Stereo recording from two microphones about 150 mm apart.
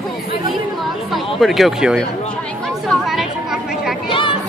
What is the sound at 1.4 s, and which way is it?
Speech, centre (ahead or behind).